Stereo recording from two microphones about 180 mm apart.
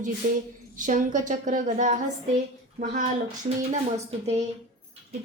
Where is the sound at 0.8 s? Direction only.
45° right (ahead or behind).